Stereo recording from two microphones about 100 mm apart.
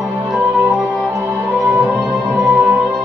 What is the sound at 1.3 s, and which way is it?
Music, 5° right (ahead or behind).